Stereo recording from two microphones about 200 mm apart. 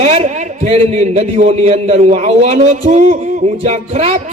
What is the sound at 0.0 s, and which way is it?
Speech, 30° right (ahead or behind).